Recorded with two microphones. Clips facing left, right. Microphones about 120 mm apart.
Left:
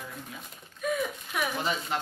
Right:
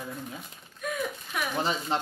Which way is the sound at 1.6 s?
30° right (ahead or behind).